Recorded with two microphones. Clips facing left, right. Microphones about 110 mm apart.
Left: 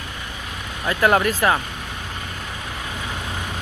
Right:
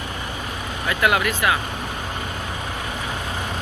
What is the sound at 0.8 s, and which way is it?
Speech, 35° left (ahead or behind).